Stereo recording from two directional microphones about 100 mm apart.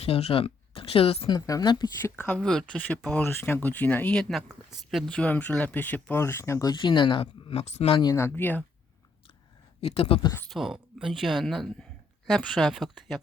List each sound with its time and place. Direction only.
0.0 s speech: 80° left
1.3 s speech: 35° left (ahead or behind)
2.0 s speech: 20° left (ahead or behind)
2.4 s speech: 5° left (ahead or behind)
5.0 s speech: 15° left (ahead or behind); by 6.7 s 30° left (ahead or behind)
6.8 s speech: 55° left (ahead or behind); by 7.9 s 90° left
8.1 s speech: 25° left (ahead or behind)
9.8 s speech: 75° left (ahead or behind)
10.5 s speech: 5° right (ahead or behind)